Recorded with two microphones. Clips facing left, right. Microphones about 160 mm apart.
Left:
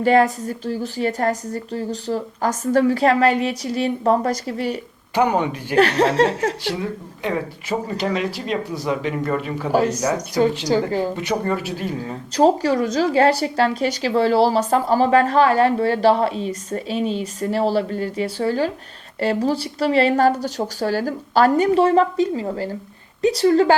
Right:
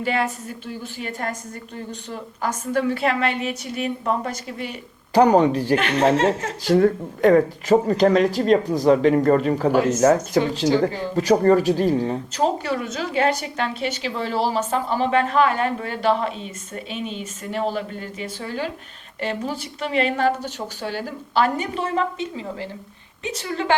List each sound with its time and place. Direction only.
0.0 s speech: 40° left (ahead or behind)
5.1 s speech: 35° right (ahead or behind)
5.7 s speech: 35° left (ahead or behind)
6.7 s speech: 50° right (ahead or behind)
9.7 s speech: 35° left (ahead or behind)
11.2 s speech: 40° right (ahead or behind)
12.4 s speech: 35° left (ahead or behind)